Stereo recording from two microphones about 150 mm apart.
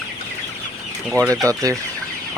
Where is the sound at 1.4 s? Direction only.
20° right (ahead or behind).